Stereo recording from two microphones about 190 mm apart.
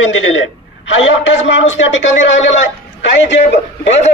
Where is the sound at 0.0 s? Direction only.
90° left.